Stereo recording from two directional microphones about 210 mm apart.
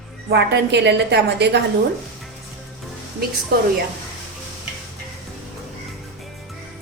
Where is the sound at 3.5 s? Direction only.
45° right (ahead or behind).